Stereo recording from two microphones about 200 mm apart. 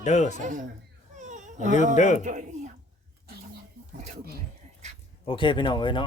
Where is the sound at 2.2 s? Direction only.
40° right (ahead or behind).